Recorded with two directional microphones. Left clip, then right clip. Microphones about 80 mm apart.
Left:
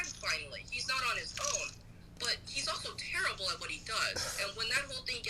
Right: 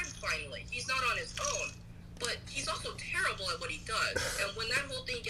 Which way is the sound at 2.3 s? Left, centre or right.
Left.